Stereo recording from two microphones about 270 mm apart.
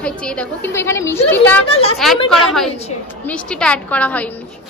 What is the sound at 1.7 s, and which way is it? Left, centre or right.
Speech, left.